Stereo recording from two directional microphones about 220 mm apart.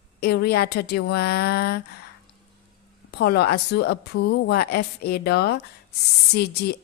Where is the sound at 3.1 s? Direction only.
50° left (ahead or behind).